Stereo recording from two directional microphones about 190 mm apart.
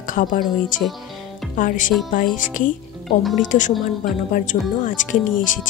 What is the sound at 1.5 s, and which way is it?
Speech, 45° left (ahead or behind).